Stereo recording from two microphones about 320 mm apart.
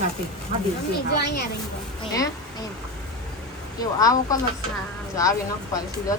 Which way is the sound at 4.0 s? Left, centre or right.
Centre.